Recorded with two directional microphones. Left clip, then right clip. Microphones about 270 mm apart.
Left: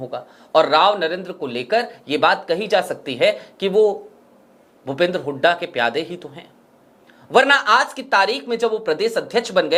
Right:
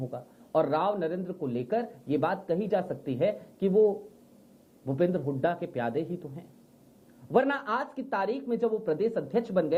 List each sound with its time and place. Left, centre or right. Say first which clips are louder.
0.1 s speech: left 13 dB; centre
3.8 s speech: left 8 dB; left
4.9 s speech: left 8 dB; centre
7.3 s speech: left 13 dB; centre